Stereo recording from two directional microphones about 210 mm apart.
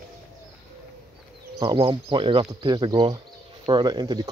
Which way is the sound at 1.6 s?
25° right (ahead or behind).